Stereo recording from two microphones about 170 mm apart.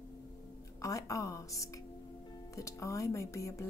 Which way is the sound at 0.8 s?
20° left (ahead or behind).